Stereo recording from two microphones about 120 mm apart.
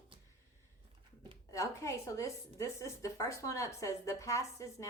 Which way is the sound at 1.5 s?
25° left (ahead or behind).